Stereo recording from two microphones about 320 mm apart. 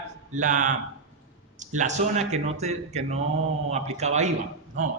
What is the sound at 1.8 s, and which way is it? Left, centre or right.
Speech, right.